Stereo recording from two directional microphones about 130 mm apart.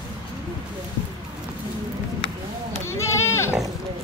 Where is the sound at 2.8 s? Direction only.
20° left (ahead or behind).